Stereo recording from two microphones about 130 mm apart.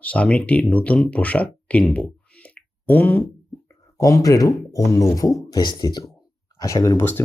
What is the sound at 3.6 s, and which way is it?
Speech, 25° left (ahead or behind).